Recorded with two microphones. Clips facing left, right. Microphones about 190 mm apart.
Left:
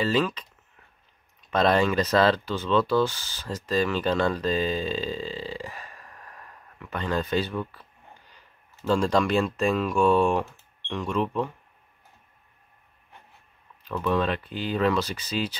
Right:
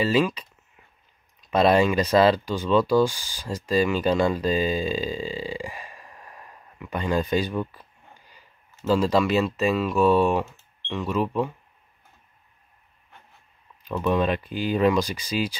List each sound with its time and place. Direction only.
0.0 s a sound: 10° right (ahead or behind)
1.5 s speech: 10° right (ahead or behind)
13.8 s speech: 15° right (ahead or behind)